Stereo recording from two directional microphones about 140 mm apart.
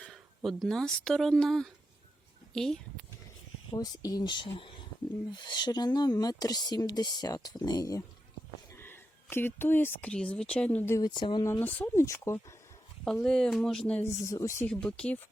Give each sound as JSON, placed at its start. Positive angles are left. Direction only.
{"t": 0.0, "sound": "speech", "side_deg": 5}
{"t": 3.7, "sound": "speech", "side_deg": 25}
{"t": 11.1, "sound": "speech", "side_deg": 35}
{"t": 11.6, "sound": "speech", "side_deg": 15}
{"t": 13.2, "sound": "speech", "side_deg": 5}
{"t": 14.3, "sound": "speech", "side_deg": 20}
{"t": 14.7, "sound": "speech", "side_deg": 5}